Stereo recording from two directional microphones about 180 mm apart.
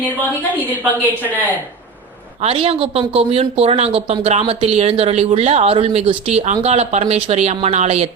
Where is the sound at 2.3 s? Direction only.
30° right (ahead or behind).